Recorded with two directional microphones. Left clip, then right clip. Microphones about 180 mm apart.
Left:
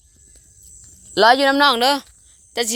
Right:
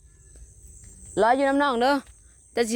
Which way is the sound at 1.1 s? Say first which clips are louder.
Left 7 dB; 15° left (ahead or behind).